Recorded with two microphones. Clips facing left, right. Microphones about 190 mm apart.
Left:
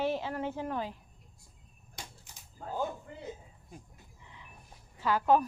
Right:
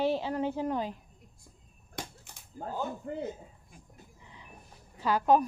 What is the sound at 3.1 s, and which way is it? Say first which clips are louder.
Speech: right 11 dB; 45° right (ahead or behind).